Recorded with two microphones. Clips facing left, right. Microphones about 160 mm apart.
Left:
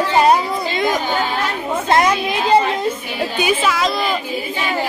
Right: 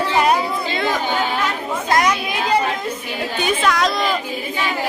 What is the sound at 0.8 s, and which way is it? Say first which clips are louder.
Speech: left 3 dB; 15° left (ahead or behind).